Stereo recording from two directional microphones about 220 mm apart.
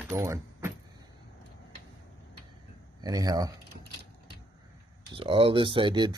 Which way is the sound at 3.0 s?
15° right (ahead or behind).